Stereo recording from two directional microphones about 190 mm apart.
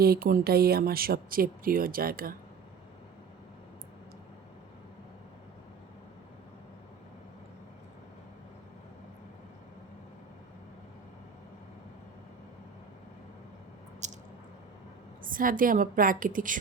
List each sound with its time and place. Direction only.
0.0 s speech: 50° right (ahead or behind)
14.0 s squish: 40° right (ahead or behind)
15.2 s speech: 45° right (ahead or behind)